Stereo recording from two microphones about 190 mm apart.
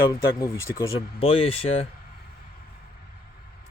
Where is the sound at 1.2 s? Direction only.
30° left (ahead or behind).